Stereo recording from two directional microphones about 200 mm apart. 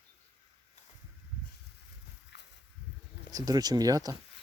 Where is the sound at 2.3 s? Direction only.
60° left (ahead or behind).